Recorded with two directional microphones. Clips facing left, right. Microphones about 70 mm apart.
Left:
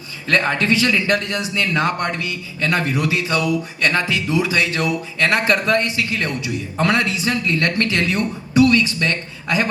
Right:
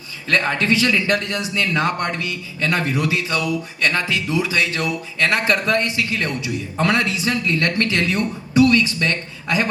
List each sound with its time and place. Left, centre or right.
0.3 s speech: left